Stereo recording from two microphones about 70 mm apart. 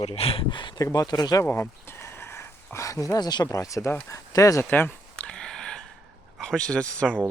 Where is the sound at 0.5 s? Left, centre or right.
Left.